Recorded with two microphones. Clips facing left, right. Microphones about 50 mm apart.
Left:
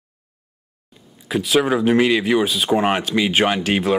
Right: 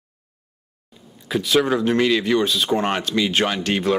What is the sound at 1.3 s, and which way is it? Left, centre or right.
Speech, centre.